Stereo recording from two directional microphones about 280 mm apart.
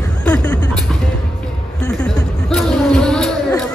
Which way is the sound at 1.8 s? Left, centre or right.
Centre.